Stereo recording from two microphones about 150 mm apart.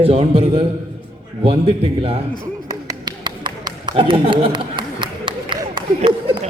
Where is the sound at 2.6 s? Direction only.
25° right (ahead or behind).